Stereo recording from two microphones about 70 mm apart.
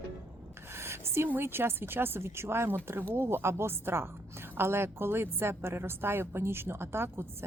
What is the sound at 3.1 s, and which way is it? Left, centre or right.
A woman's voice, right.